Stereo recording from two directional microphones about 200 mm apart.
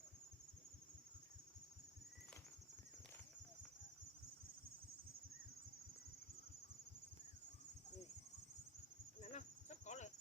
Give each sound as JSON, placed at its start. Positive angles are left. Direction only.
{"t": 9.2, "sound": "cricket", "side_deg": 35}